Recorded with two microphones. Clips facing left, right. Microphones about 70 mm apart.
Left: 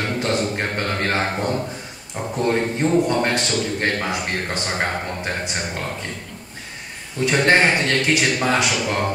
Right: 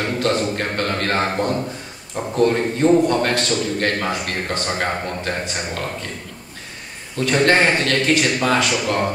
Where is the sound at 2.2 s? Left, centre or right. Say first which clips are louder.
Right 3 dB; centre.